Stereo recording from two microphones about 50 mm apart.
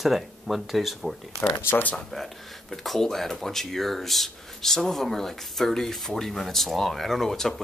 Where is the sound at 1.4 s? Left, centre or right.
Left.